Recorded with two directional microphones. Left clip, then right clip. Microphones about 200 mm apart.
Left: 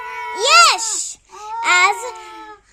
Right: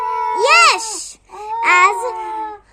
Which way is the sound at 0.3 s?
15° left (ahead or behind).